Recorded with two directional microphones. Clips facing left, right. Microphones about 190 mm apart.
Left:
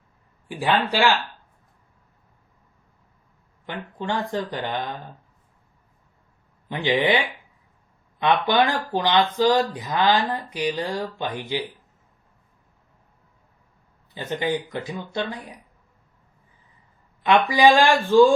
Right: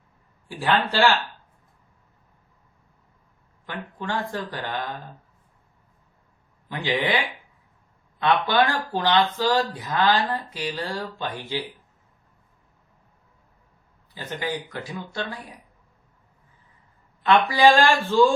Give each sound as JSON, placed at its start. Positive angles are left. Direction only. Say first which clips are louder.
{"t": 0.4, "sound": "speech", "louder": "left 1 dB", "side_deg": 15}
{"t": 3.7, "sound": "speech", "louder": "left 2 dB", "side_deg": 20}
{"t": 6.7, "sound": "speech", "louder": "left 4 dB", "side_deg": 20}
{"t": 8.2, "sound": "speech", "louder": "left 1 dB", "side_deg": 15}
{"t": 14.2, "sound": "speech", "louder": "left 5 dB", "side_deg": 20}
{"t": 17.5, "sound": "speech", "louder": "left 2 dB", "side_deg": 15}